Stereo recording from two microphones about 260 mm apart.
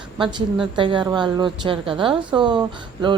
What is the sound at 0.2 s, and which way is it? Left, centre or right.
A woman's voice, centre.